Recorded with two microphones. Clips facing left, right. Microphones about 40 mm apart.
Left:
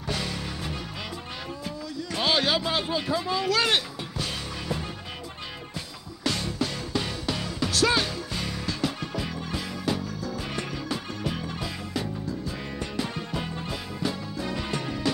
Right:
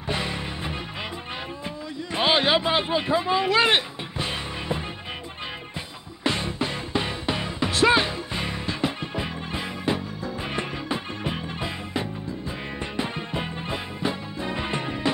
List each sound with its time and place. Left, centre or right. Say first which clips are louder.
0.1 s music: right 3 dB; right
2.1 s a sound: right 4 dB; right
6.2 s music: right 3 dB; right